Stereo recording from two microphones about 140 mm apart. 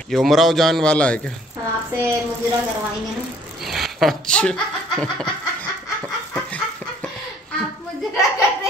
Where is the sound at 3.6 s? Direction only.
Centre (ahead or behind).